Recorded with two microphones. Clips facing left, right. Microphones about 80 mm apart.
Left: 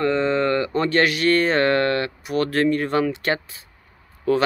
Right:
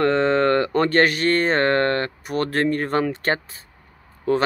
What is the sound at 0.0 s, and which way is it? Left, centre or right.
Speech, right.